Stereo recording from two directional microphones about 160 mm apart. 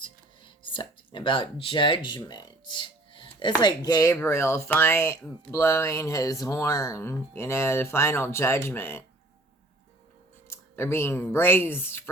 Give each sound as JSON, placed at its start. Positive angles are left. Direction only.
{"t": 0.0, "sound": "a sound", "side_deg": 30}
{"t": 3.6, "sound": "speech", "side_deg": 25}
{"t": 10.5, "sound": "speech", "side_deg": 15}